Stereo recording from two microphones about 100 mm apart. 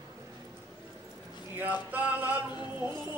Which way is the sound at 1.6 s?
15° right (ahead or behind).